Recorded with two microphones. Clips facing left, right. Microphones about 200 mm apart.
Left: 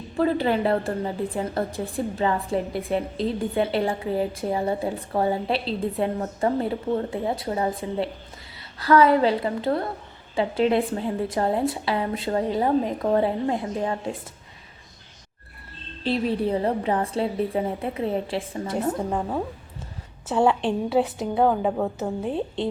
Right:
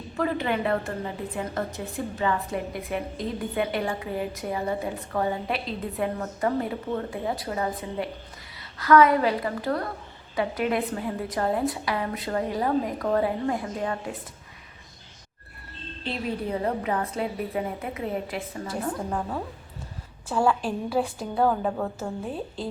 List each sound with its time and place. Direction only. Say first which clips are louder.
0.2 s a woman's voice: left 5 dB; 30° left (ahead or behind)
16.0 s a woman's voice: left 6 dB; 30° left (ahead or behind)